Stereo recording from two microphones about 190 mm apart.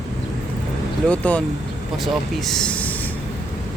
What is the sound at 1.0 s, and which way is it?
Speech, 5° left (ahead or behind).